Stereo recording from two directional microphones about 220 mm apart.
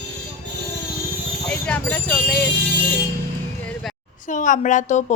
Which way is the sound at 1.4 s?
5° left (ahead or behind).